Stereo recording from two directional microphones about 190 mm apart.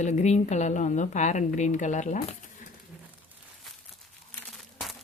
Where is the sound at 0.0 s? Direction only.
35° left (ahead or behind).